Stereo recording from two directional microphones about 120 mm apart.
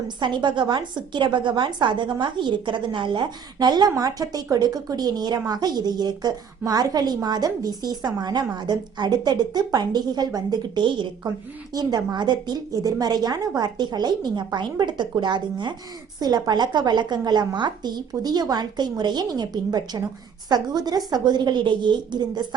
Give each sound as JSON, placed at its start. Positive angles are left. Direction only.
{"t": 0.2, "sound": "a woman's voice", "side_deg": -40}